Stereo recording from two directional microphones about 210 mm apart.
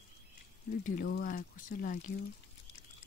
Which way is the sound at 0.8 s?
40° left (ahead or behind).